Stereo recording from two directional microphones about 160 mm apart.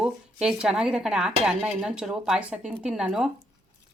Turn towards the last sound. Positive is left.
turn(degrees=-5)  # may be behind; listen again after turning